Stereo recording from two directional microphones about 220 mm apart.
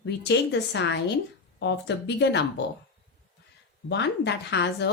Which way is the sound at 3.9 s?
50° left (ahead or behind).